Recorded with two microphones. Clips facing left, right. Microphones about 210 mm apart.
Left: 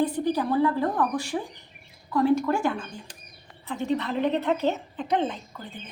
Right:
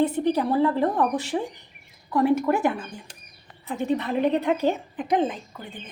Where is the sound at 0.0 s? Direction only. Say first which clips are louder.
Right 3 dB; 25° right (ahead or behind).